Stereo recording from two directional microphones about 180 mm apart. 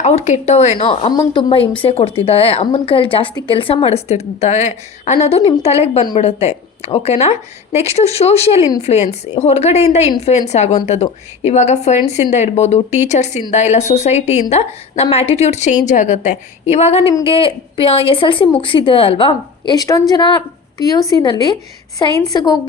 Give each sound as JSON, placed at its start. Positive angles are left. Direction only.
{"t": 0.0, "sound": "a woman's voice", "side_deg": 40}
{"t": 1.1, "sound": "a woman's voice", "side_deg": 25}